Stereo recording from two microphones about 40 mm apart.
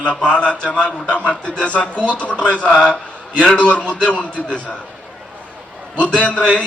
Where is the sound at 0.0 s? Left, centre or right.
Left.